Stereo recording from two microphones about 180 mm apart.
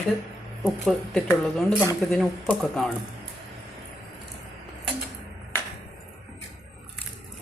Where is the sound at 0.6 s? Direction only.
5° left (ahead or behind).